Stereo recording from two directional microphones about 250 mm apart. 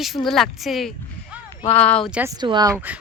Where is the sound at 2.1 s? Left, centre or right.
Centre.